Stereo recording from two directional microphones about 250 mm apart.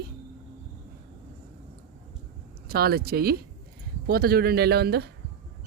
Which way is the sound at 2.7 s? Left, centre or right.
Right.